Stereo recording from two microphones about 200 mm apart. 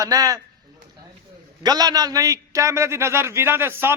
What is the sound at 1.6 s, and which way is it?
A man's voice, 20° right (ahead or behind).